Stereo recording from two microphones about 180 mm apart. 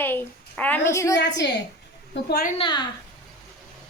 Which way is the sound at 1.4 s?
75° left (ahead or behind).